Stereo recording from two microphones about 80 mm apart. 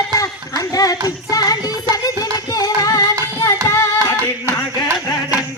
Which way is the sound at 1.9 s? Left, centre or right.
Left.